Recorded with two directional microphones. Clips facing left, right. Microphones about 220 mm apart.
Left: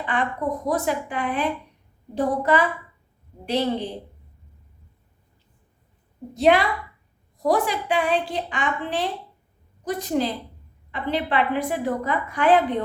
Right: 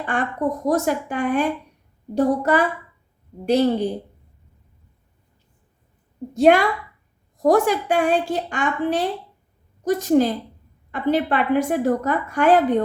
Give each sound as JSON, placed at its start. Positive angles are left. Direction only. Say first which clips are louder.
{"t": 0.0, "sound": "a woman's voice", "louder": "right 3 dB", "side_deg": -45}
{"t": 6.3, "sound": "a woman's voice", "louder": "right 3 dB", "side_deg": -50}